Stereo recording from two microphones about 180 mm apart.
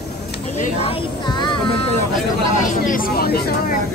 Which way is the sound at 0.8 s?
30° left (ahead or behind).